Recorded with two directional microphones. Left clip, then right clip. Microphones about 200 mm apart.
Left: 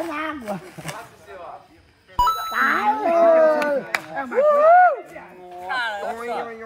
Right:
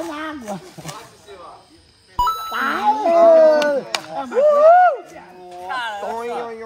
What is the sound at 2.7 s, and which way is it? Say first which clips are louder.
Speech: right 5 dB; 25° right (ahead or behind).